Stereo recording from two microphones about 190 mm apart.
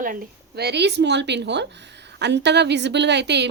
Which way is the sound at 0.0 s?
45° right (ahead or behind).